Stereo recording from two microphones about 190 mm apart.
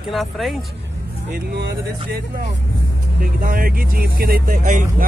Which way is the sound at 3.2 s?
50° right (ahead or behind).